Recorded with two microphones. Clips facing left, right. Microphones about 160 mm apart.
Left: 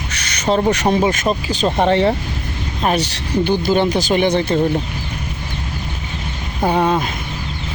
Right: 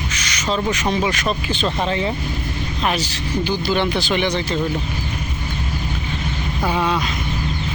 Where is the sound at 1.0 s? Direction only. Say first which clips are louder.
Left 4 dB; 40° left (ahead or behind).